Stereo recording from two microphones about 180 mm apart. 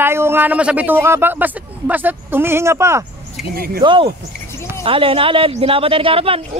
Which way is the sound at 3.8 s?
30° right (ahead or behind).